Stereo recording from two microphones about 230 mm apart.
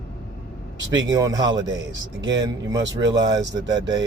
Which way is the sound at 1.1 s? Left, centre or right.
Centre.